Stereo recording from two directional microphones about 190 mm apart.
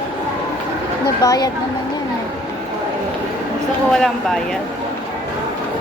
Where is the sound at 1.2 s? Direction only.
20° left (ahead or behind).